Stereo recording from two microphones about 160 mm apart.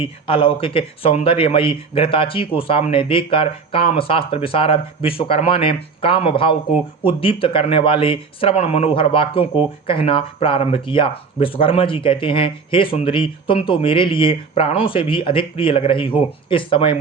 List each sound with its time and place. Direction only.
0.0 s speech: 35° left (ahead or behind)